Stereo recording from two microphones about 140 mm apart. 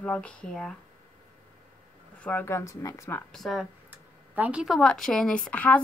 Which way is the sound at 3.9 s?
10° right (ahead or behind).